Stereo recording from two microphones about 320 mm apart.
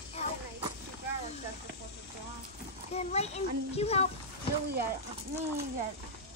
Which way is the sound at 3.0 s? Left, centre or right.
Centre.